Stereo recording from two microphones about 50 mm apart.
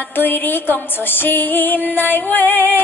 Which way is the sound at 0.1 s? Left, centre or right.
Left.